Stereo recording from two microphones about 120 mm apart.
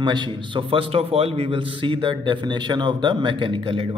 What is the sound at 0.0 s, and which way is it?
A man's voice, 40° right (ahead or behind).